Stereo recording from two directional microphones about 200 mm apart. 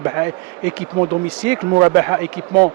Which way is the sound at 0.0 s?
15° right (ahead or behind).